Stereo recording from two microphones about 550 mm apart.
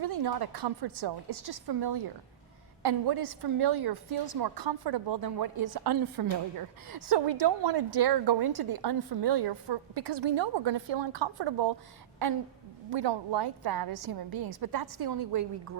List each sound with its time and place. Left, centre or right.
0.0 s a woman's voice: right
12.9 s a woman's voice: right